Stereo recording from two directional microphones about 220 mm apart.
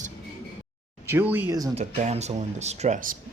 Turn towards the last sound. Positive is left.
turn(degrees=-35)  # may be behind; listen again after turning